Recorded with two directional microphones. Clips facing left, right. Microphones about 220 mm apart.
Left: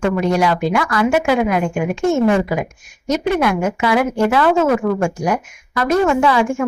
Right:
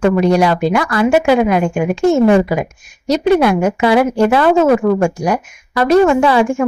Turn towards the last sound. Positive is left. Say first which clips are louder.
# right 4 dB
turn(degrees=-30)  # may be behind; listen again after turning